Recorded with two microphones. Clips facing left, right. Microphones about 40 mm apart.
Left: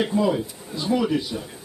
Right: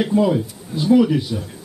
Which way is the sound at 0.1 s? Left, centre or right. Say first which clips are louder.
Right 4 dB; centre.